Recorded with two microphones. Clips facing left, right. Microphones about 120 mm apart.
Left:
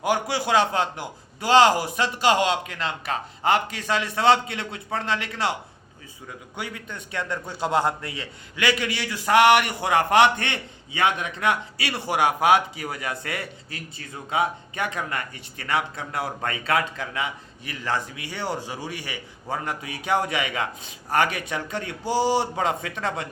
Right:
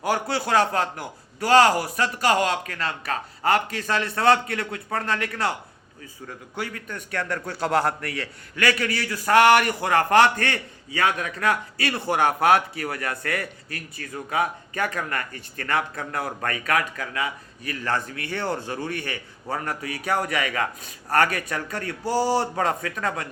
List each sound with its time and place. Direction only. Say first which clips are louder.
0.0 s a man's voice: left 1 dB; 15° left (ahead or behind)
6.6 s a man's voice: right 2 dB; 20° left (ahead or behind)